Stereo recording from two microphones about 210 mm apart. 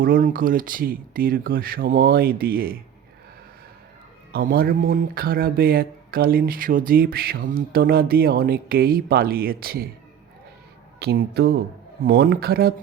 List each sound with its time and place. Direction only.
0.0 s speech: 40° right (ahead or behind)
4.3 s speech: 45° right (ahead or behind)
11.0 s speech: 50° right (ahead or behind)